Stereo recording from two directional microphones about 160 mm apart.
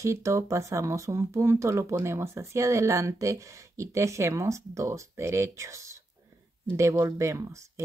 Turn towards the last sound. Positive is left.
turn(degrees=-20)  # may be behind; listen again after turning